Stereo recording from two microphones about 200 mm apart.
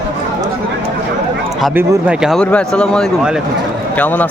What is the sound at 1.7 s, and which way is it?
Speech, 10° right (ahead or behind).